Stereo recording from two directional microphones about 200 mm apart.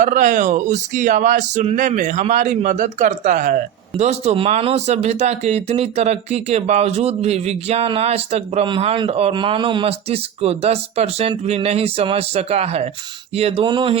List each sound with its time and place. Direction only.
0.0 s speech: 40° right (ahead or behind)